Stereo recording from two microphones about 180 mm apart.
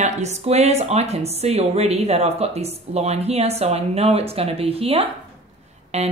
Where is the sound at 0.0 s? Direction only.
40° right (ahead or behind).